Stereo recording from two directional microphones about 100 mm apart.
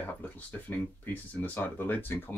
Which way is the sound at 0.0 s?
15° left (ahead or behind).